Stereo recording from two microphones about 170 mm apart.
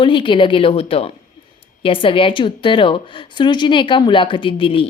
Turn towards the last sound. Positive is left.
turn(degrees=30)  # may be behind; listen again after turning